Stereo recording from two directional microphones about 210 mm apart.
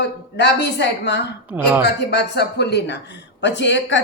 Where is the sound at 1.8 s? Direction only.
50° left (ahead or behind).